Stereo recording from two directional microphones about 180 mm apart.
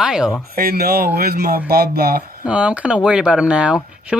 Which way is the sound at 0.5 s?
55° right (ahead or behind).